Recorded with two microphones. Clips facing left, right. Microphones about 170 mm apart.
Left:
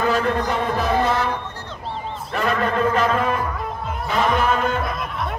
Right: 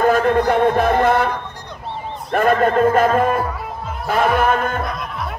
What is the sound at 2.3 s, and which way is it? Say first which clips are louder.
A man's voice: right 6 dB; 50° right (ahead or behind).